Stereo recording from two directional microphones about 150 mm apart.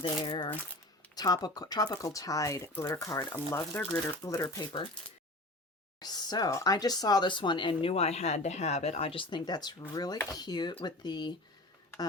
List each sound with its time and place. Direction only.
0.2 s speech: 30° left (ahead or behind)
6.0 s speech: 25° left (ahead or behind)